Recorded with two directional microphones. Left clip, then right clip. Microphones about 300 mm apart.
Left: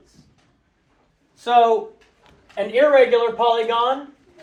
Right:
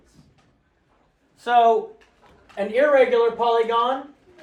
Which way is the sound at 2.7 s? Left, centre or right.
Centre.